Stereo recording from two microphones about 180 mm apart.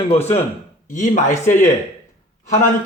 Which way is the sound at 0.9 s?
45° left (ahead or behind).